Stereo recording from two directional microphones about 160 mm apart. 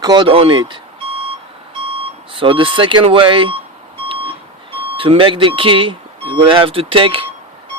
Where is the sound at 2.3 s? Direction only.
30° right (ahead or behind).